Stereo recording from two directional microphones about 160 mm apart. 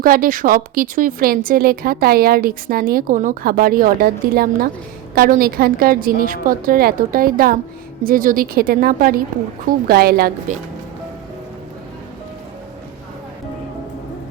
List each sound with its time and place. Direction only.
0.0 s a woman's voice: 60° right (ahead or behind)
9.8 s a woman's voice: 75° right (ahead or behind)